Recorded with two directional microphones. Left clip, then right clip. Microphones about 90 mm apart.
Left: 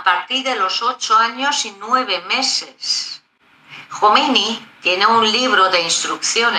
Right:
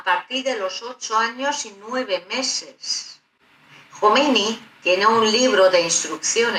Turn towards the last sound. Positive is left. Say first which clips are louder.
# left 4 dB
turn(degrees=40)  # may be behind; listen again after turning